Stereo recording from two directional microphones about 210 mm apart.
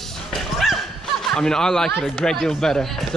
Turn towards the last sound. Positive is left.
turn(degrees=0)  # may be behind; listen again after turning